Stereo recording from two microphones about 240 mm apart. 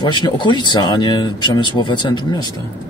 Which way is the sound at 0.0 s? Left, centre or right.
Centre.